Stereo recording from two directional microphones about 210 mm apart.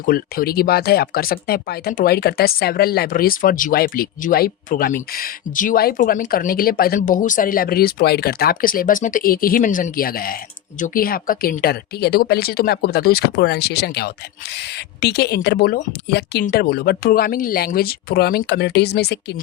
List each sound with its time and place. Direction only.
0.0 s speech: 45° left (ahead or behind)